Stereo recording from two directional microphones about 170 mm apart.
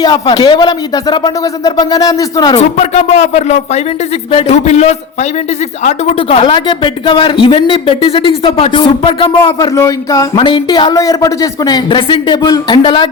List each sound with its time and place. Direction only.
0.0 s speech: 25° left (ahead or behind)
2.6 s speech: 40° left (ahead or behind)
6.3 s speech: 30° left (ahead or behind)